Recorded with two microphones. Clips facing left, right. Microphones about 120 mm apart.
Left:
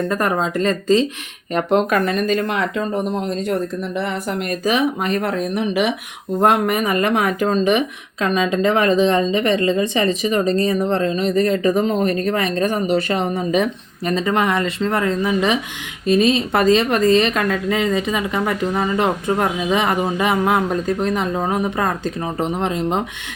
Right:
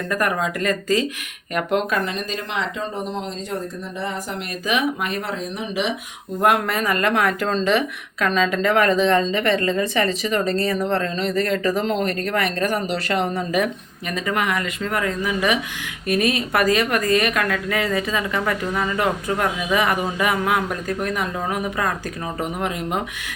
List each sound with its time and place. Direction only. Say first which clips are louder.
0.1 s a woman's voice: left 3 dB; 30° left (ahead or behind)
1.9 s speech: left 7 dB; 50° left (ahead or behind)
4.6 s speech: left 3 dB; 35° left (ahead or behind); by 5.9 s 60° left (ahead or behind)
6.7 s a woman's voice: left 3 dB; 20° left (ahead or behind)